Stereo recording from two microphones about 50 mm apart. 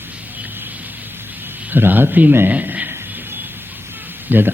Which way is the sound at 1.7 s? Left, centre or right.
Right.